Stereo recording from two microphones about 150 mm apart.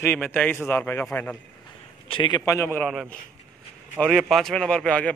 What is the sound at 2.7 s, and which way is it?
Speech, centre (ahead or behind).